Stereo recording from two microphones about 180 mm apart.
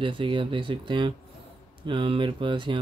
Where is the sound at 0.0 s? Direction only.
25° right (ahead or behind).